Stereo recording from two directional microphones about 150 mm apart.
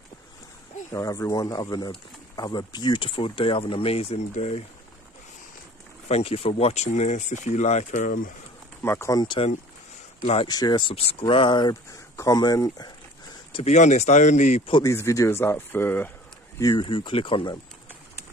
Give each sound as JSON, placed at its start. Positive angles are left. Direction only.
{"t": 0.9, "sound": "speech", "side_deg": 20}
{"t": 6.1, "sound": "speech", "side_deg": 45}
{"t": 8.8, "sound": "speech", "side_deg": 15}
{"t": 10.5, "sound": "speech", "side_deg": 30}
{"t": 13.5, "sound": "speech", "side_deg": 40}
{"t": 13.7, "sound": "speech", "side_deg": 50}
{"t": 14.7, "sound": "speech", "side_deg": 30}
{"t": 16.7, "sound": "speech", "side_deg": 35}